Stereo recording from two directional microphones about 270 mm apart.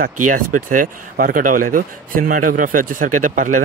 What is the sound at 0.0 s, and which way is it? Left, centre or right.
Speech, right.